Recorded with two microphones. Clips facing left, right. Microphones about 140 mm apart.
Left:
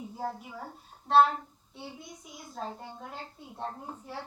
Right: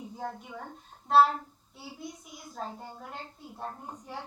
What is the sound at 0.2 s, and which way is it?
A woman's voice, 5° left (ahead or behind).